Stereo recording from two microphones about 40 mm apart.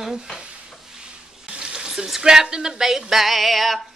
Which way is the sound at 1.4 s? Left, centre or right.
Right.